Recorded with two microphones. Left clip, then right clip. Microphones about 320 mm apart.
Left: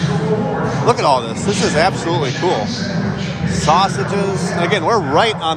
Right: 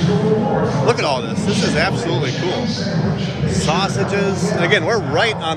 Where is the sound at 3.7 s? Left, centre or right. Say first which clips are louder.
Left 6 dB; centre.